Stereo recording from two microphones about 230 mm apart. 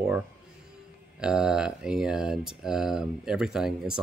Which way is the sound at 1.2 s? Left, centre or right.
Centre.